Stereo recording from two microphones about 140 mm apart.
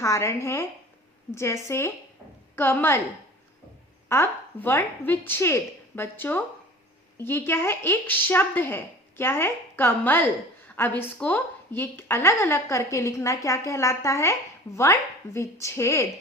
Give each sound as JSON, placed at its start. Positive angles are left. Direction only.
{"t": 0.0, "sound": "a woman's voice", "side_deg": 20}
{"t": 4.1, "sound": "a woman's voice", "side_deg": 15}